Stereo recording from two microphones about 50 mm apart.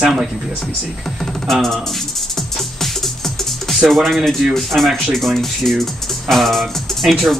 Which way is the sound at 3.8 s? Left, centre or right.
Centre.